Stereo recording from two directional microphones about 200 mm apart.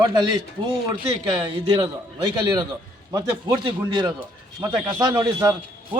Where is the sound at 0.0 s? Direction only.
20° right (ahead or behind).